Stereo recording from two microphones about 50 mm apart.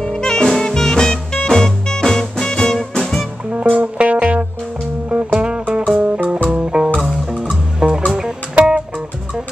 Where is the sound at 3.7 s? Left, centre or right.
Right.